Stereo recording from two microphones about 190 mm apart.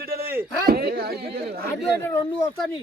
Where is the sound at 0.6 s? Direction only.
55° right (ahead or behind).